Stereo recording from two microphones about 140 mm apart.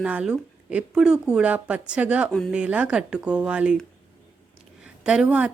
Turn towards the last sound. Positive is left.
turn(degrees=-5)  # may be behind; listen again after turning